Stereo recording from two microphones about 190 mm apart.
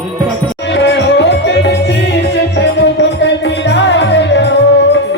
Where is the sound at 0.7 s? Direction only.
65° left (ahead or behind).